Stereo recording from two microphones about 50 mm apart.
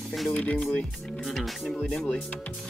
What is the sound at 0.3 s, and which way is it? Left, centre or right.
Speech, left.